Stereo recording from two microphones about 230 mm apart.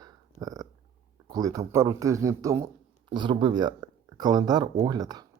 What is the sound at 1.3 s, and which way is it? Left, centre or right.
Speech, centre.